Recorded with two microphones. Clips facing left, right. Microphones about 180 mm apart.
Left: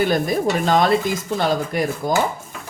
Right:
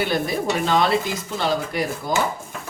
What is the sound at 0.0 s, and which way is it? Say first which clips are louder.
Speech: left 4 dB; 45° left (ahead or behind).